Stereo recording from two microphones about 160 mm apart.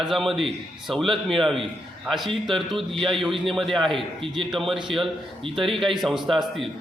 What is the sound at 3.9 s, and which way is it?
Speech, 35° right (ahead or behind).